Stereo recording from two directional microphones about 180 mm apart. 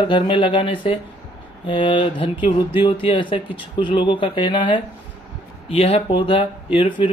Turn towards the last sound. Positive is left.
turn(degrees=30)  # may be behind; listen again after turning